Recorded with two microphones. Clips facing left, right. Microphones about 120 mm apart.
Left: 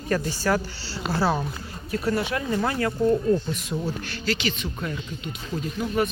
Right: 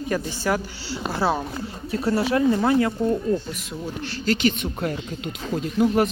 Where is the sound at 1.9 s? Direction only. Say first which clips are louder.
Right 3 dB; 30° right (ahead or behind).